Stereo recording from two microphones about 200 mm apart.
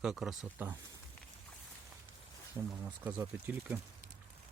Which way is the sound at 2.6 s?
20° right (ahead or behind).